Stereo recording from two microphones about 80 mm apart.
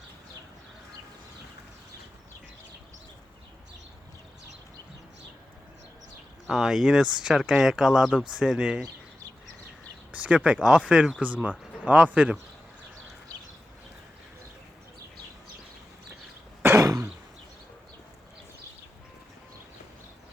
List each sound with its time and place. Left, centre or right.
6.5 s speech: centre
10.1 s speech: centre
16.6 s throat clearing: right